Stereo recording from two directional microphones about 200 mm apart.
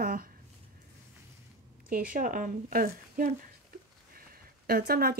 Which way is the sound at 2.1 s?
45° right (ahead or behind).